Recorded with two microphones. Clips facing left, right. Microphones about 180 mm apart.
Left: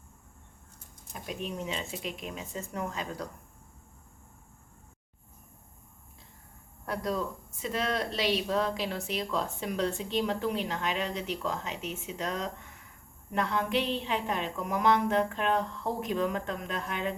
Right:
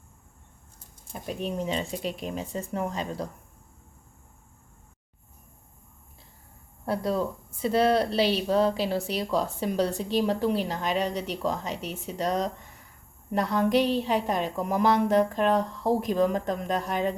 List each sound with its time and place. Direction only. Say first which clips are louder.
1.0 s speech: right 5 dB; 35° right (ahead or behind)
6.8 s speech: right 5 dB; 30° right (ahead or behind)